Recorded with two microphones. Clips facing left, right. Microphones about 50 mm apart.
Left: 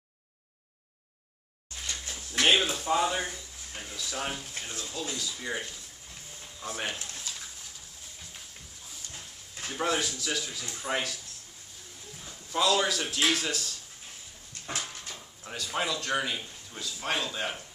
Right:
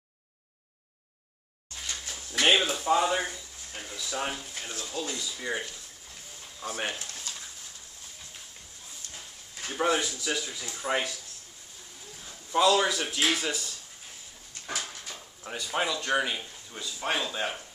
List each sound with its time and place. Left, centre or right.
1.8 s a sound: centre
3.9 s a man's voice: centre
9.1 s a sound: centre
10.0 s a man's voice: centre
12.4 s a man's voice: centre
15.4 s a man's voice: centre